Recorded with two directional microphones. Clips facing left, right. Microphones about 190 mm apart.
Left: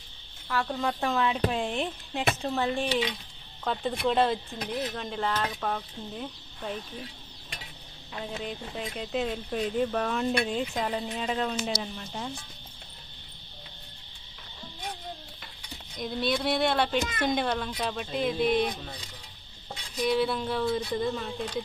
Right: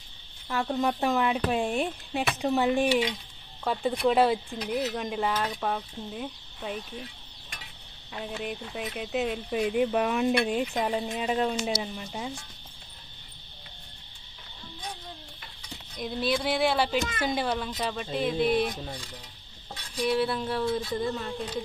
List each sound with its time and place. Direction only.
0.4 s speech: 20° right (ahead or behind); by 6.8 s 5° right (ahead or behind)
8.4 s speech: 5° right (ahead or behind)
16.0 s speech: 5° right (ahead or behind)
20.0 s speech: 5° right (ahead or behind)